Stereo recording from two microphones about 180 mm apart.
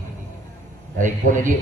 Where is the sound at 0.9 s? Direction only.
45° right (ahead or behind).